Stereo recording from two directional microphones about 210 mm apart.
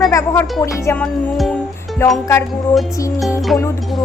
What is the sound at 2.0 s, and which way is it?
Speech, 15° left (ahead or behind).